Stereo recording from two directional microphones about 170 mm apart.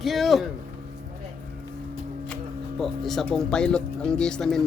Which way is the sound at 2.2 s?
5° left (ahead or behind).